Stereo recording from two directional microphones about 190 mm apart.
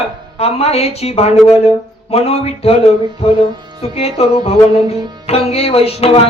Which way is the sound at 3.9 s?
30° left (ahead or behind).